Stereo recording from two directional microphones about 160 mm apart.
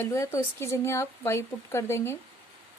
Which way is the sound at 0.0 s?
15° left (ahead or behind).